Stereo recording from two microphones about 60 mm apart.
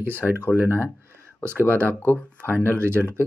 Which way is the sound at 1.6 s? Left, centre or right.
Left.